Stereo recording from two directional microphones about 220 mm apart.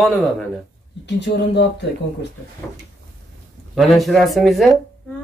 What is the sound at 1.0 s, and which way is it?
Speech, 50° left (ahead or behind).